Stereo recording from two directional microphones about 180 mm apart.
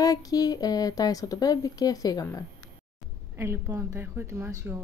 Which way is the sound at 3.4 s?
15° right (ahead or behind).